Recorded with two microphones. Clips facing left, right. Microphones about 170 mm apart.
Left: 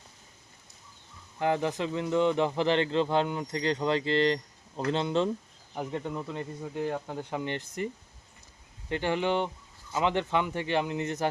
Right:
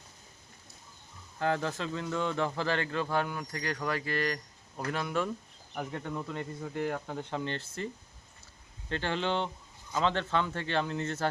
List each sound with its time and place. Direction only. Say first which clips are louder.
1.4 s speech: left 3 dB; 15° left (ahead or behind)
8.9 s speech: left 4 dB; 15° left (ahead or behind)